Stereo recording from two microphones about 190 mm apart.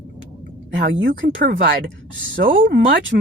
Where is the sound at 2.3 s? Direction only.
45° right (ahead or behind).